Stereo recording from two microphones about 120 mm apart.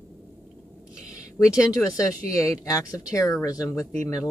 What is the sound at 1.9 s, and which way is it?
Speech, 25° left (ahead or behind).